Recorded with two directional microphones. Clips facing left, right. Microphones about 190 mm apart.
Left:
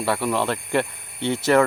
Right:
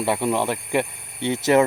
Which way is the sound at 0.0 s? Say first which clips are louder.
Right 1 dB; 20° right (ahead or behind).